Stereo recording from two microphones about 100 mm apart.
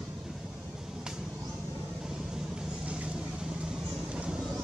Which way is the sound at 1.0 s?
5° right (ahead or behind).